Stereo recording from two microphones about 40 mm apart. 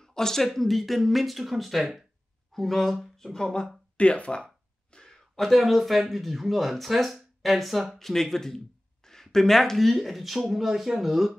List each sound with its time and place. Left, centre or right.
0.0 s a sound: centre
0.6 s speech: centre
3.9 s speech: left
4.9 s speech: centre